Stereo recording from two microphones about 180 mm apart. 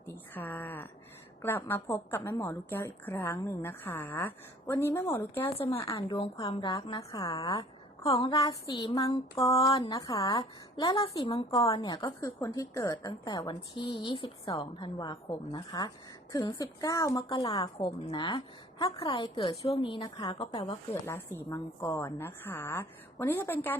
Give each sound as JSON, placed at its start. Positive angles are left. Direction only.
{"t": 0.1, "sound": "a sound", "side_deg": 10}
{"t": 1.4, "sound": "a woman's voice", "side_deg": 10}
{"t": 5.5, "sound": "a woman's voice", "side_deg": 35}
{"t": 10.3, "sound": "a woman's voice", "side_deg": 30}
{"t": 21.1, "sound": "a woman's voice", "side_deg": 15}